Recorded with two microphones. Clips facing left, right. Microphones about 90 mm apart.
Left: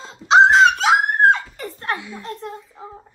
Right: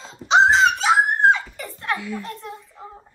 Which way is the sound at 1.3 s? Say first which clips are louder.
Left 1 dB; 40° left (ahead or behind).